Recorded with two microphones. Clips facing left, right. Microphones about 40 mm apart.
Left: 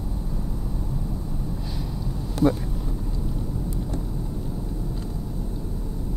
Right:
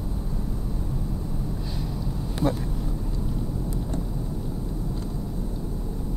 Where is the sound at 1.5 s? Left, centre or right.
Centre.